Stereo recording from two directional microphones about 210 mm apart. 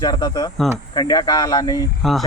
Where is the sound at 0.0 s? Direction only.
20° left (ahead or behind).